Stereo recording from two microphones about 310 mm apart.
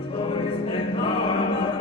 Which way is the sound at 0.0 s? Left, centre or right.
Centre.